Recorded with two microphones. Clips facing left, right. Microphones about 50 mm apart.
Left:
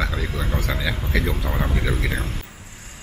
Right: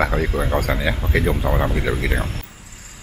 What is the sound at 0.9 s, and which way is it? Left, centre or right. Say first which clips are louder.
Speech: right 4 dB; centre.